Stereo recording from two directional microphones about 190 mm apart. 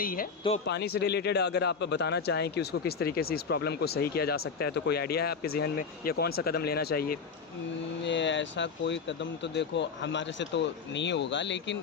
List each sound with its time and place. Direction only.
0.0 s speech: 50° left (ahead or behind)
0.6 s speech: 60° left (ahead or behind)
8.0 s speech: 70° left (ahead or behind)